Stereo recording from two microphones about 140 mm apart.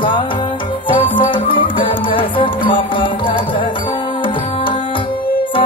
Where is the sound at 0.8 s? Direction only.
35° left (ahead or behind).